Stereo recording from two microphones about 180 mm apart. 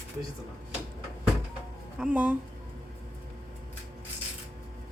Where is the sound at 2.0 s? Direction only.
10° right (ahead or behind).